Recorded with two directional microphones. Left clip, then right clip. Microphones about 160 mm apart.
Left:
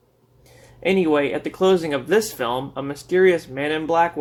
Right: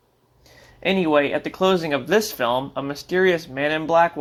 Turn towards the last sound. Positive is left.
turn(degrees=-20)  # may be behind; listen again after turning